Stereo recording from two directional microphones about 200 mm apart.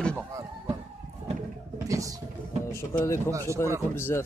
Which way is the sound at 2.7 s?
15° left (ahead or behind).